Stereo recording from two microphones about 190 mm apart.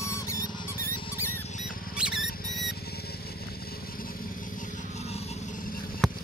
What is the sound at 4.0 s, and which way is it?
Vehicle, 50° left (ahead or behind).